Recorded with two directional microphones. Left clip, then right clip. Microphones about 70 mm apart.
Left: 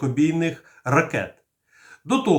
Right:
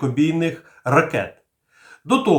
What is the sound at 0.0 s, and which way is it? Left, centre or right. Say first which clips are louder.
Speech: right 2 dB; centre.